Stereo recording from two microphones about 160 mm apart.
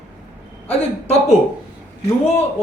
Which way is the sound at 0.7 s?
40° left (ahead or behind).